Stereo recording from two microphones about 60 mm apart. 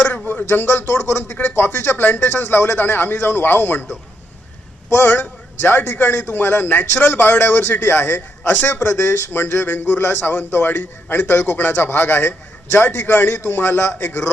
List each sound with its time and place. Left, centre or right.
0.0 s a sound: left
0.4 s a man's voice: left
4.9 s a man's voice: left